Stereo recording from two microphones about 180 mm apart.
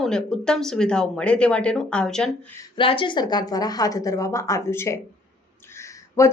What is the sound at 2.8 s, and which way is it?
A woman's voice, 30° left (ahead or behind).